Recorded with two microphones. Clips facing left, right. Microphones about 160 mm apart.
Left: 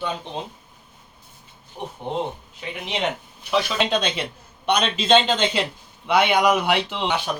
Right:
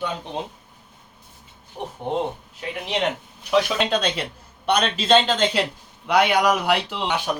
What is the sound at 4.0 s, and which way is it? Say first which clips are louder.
Speech: even; 5° left (ahead or behind).